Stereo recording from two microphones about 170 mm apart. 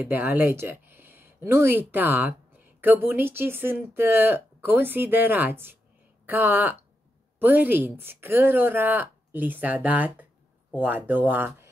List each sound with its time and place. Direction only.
0.0 s a woman's voice: 10° right (ahead or behind)